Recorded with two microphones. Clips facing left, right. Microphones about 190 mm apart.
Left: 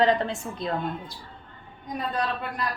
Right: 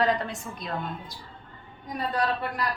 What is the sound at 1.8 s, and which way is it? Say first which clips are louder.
Speech: right 1 dB; 20° left (ahead or behind).